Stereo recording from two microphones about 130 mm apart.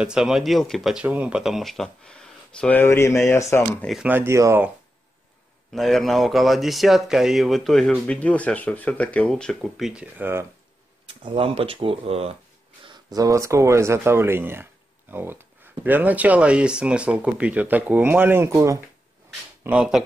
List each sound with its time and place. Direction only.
0.0 s speech: 5° right (ahead or behind)
2.6 s speech: 15° left (ahead or behind)
3.8 s speech: centre (ahead or behind)
4.1 s speech: 20° right (ahead or behind)
5.7 s speech: centre (ahead or behind)
10.1 s speech: 15° right (ahead or behind)
11.2 s speech: 45° right (ahead or behind)
13.1 s speech: 25° right (ahead or behind)
19.6 s speech: 10° right (ahead or behind)